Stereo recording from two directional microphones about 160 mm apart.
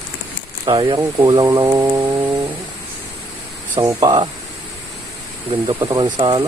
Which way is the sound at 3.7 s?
25° right (ahead or behind).